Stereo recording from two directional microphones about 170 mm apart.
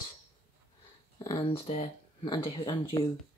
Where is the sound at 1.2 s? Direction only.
20° left (ahead or behind).